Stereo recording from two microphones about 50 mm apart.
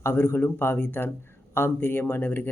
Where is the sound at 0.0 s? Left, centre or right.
Left.